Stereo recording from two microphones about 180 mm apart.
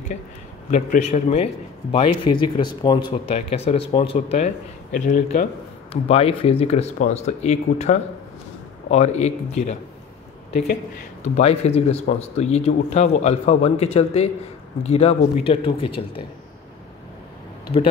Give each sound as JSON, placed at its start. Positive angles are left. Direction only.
{"t": 0.7, "sound": "a man's voice", "side_deg": 40}
{"t": 4.9, "sound": "speech", "side_deg": 45}
{"t": 6.0, "sound": "a man's voice", "side_deg": 35}